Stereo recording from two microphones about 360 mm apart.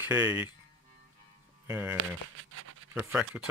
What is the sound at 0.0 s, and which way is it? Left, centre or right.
Speech, centre.